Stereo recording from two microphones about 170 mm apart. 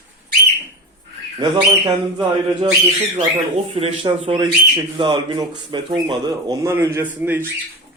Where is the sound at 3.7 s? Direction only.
35° right (ahead or behind); by 7.4 s 15° right (ahead or behind).